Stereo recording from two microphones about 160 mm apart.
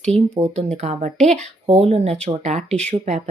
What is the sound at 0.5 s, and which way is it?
A woman's voice, 45° right (ahead or behind).